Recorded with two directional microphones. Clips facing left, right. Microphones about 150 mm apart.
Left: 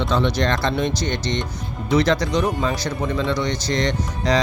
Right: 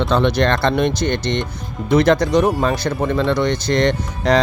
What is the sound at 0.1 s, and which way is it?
Speech, 60° right (ahead or behind).